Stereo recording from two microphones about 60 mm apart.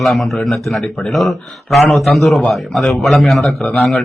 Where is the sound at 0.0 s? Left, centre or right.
Centre.